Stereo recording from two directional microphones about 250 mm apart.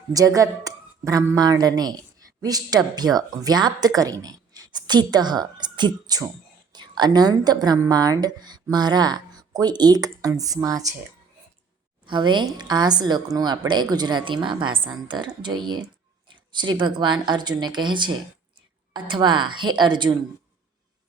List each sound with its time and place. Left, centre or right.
0.1 s speech: centre
12.0 s a woman's voice: centre